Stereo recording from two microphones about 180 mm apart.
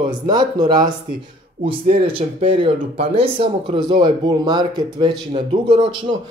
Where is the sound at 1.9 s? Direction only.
30° right (ahead or behind).